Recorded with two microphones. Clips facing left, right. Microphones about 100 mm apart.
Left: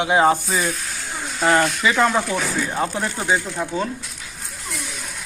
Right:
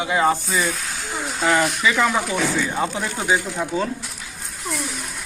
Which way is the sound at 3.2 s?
15° right (ahead or behind).